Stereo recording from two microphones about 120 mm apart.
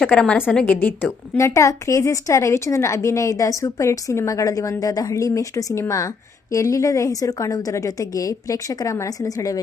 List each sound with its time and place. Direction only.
0.0 s a woman's voice: 5° left (ahead or behind); by 9.6 s 30° left (ahead or behind)